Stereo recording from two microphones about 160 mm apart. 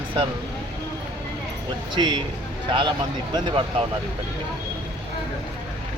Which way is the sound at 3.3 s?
35° right (ahead or behind).